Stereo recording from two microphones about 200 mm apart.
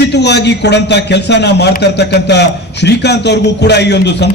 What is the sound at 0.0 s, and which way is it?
A man's voice, 55° left (ahead or behind).